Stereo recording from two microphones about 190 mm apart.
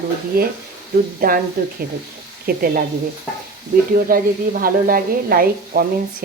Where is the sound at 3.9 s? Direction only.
50° right (ahead or behind).